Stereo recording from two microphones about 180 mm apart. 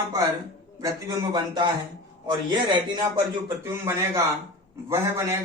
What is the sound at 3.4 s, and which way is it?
A man's voice, 15° right (ahead or behind).